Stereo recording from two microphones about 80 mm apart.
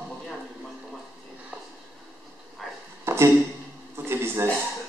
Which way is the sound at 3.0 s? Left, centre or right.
Right.